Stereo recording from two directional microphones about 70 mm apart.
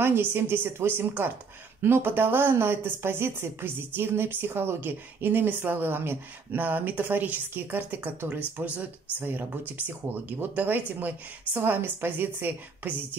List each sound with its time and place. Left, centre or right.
0.0 s a woman's voice: right